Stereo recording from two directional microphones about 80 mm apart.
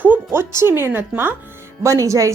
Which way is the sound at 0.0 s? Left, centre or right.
Right.